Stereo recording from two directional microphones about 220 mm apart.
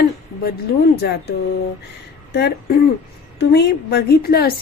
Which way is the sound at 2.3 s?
50° left (ahead or behind).